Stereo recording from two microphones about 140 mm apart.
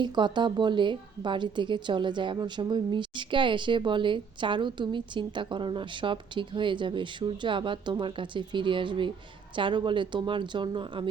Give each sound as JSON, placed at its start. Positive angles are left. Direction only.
{"t": 0.0, "sound": "a woman's voice", "side_deg": -35}